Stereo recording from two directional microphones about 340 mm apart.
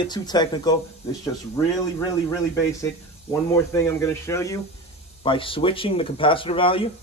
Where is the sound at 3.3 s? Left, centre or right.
Centre.